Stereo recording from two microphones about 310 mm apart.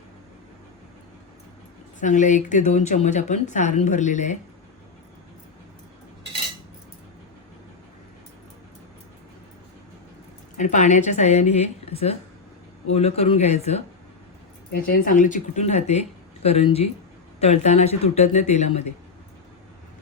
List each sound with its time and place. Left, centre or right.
2.0 s a woman's voice: left
10.6 s a woman's voice: left